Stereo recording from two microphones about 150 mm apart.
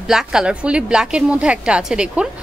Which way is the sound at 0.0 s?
5° right (ahead or behind).